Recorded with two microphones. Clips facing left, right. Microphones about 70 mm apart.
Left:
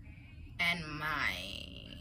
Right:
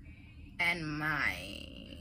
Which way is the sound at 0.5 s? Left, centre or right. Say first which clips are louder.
Right 2 dB; right.